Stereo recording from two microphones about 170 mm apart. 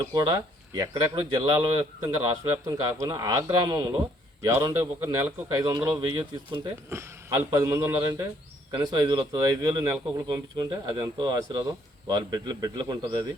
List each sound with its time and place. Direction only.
0.0 s a man's voice: 20° right (ahead or behind)